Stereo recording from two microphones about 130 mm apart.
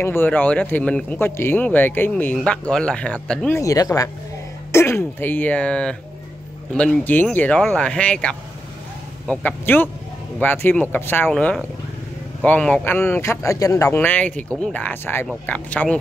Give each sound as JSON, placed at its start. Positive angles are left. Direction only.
{"t": 0.0, "sound": "speech", "side_deg": 15}
{"t": 3.5, "sound": "speech", "side_deg": 25}
{"t": 11.2, "sound": "speech", "side_deg": 5}
{"t": 13.9, "sound": "speech", "side_deg": 10}